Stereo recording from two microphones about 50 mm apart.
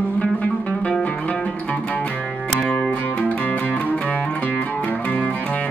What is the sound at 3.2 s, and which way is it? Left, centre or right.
Music, left.